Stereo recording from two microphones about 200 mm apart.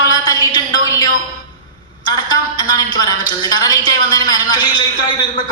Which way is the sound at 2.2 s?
20° left (ahead or behind).